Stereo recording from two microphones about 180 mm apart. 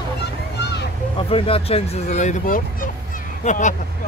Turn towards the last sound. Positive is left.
turn(degrees=45)  # may be behind; listen again after turning